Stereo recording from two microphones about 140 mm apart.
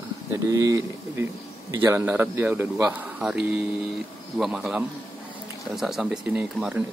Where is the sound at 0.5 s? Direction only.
20° right (ahead or behind).